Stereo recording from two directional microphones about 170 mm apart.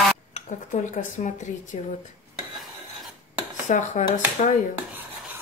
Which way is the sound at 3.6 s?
45° left (ahead or behind).